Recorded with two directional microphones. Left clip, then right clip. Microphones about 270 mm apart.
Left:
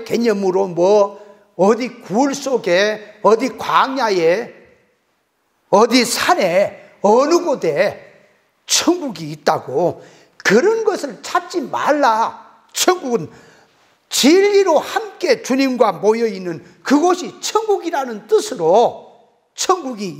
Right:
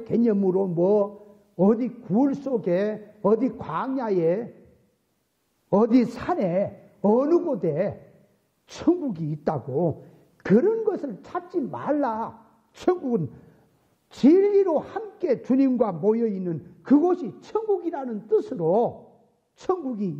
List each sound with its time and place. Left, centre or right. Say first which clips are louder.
0.0 s a man's voice: left 6 dB; centre
5.7 s a man's voice: left 9 dB; centre
9.6 s a man's voice: left 8 dB; centre
10.3 s a man's voice: left 8 dB; centre
13.1 s a man's voice: left 7 dB; centre